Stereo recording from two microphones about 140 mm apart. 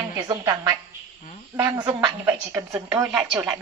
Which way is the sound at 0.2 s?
25° right (ahead or behind).